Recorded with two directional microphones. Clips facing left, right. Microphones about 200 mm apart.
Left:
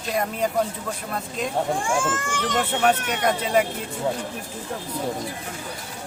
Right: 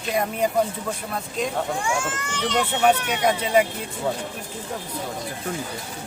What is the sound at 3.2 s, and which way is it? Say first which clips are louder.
Speech: right 1 dB; centre (ahead or behind).